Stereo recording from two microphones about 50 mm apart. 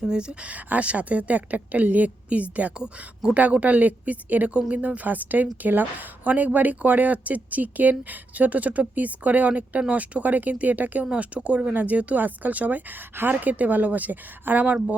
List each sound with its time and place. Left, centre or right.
0.1 s a woman's voice: centre
2.8 s speech: centre
3.3 s speech: right
11.0 s a woman's voice: right